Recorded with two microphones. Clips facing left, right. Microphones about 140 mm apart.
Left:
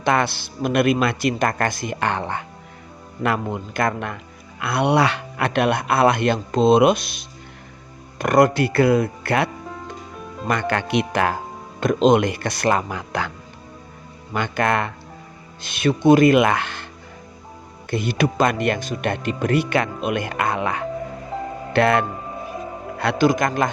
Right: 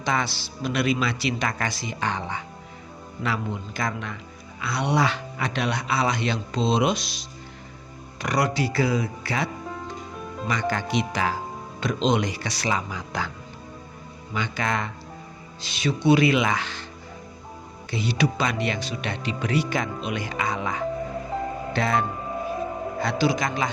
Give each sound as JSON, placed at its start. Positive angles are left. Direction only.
{"t": 0.0, "sound": "speech", "side_deg": 60}
{"t": 9.6, "sound": "music", "side_deg": 0}
{"t": 10.4, "sound": "speech", "side_deg": 55}
{"t": 14.3, "sound": "speech", "side_deg": 55}
{"t": 17.9, "sound": "speech", "side_deg": 50}